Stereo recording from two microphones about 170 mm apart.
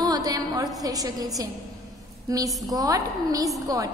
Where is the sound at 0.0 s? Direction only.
20° right (ahead or behind).